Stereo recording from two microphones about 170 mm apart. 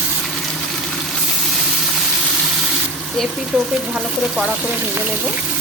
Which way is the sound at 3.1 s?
Centre (ahead or behind).